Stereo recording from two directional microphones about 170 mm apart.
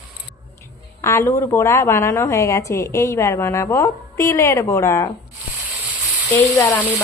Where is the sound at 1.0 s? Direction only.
15° left (ahead or behind).